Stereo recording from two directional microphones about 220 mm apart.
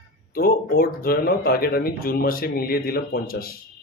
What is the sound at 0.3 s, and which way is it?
A man's voice, 40° left (ahead or behind).